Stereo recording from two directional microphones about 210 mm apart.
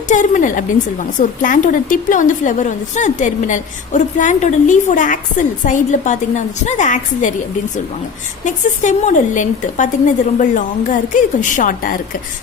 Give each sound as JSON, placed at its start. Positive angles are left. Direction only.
{"t": 0.1, "sound": "a woman's voice", "side_deg": 35}
{"t": 8.4, "sound": "a woman's voice", "side_deg": 35}